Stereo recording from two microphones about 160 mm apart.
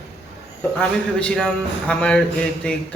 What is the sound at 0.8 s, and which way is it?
Speech, 5° left (ahead or behind).